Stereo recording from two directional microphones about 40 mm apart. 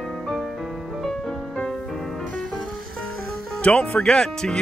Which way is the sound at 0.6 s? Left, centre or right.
Centre.